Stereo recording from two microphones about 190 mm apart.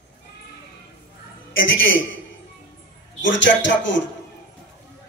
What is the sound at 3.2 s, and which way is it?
Speech, 75° left (ahead or behind).